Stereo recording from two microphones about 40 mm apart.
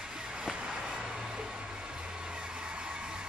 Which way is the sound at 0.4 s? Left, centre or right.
Centre.